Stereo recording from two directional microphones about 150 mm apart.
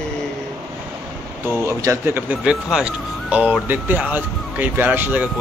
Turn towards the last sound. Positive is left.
turn(degrees=-10)  # may be behind; listen again after turning